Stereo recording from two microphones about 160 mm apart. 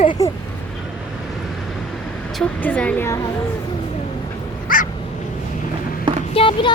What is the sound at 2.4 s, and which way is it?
Speech, 10° left (ahead or behind).